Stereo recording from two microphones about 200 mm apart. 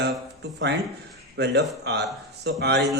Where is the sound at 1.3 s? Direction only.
55° right (ahead or behind).